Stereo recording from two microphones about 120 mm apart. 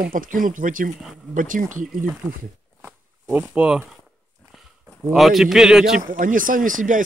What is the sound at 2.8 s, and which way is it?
Zipper, 15° right (ahead or behind).